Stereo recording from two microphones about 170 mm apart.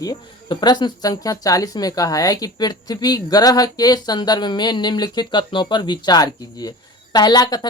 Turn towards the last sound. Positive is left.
turn(degrees=25)  # may be behind; listen again after turning